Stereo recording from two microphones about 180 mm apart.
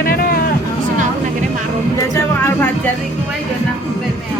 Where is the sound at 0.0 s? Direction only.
55° left (ahead or behind).